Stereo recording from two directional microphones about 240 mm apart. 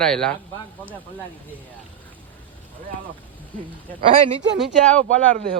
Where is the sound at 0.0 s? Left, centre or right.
Centre.